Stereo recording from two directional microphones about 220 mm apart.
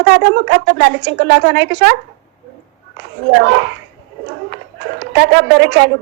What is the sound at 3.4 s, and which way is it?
Speech, 50° right (ahead or behind).